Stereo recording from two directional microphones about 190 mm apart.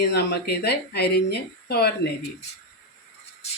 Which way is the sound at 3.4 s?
35° left (ahead or behind).